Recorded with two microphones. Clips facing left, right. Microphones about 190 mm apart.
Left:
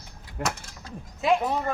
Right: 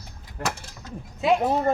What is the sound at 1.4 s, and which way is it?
Speech, 40° right (ahead or behind).